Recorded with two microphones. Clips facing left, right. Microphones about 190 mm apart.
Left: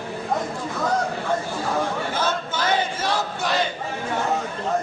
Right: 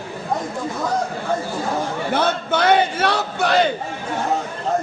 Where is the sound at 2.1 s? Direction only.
65° right (ahead or behind).